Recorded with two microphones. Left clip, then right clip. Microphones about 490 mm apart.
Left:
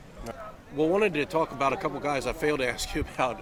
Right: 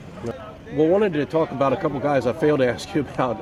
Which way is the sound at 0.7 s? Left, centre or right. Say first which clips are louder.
Right 6 dB; right.